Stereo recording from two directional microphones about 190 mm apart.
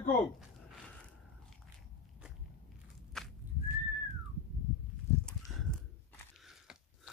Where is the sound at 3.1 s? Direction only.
Centre (ahead or behind).